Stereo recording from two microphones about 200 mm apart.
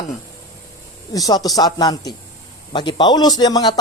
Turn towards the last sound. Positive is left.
turn(degrees=20)  # may be behind; listen again after turning